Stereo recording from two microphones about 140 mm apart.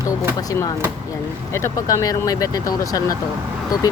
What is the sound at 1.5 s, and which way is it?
Speech, 20° left (ahead or behind).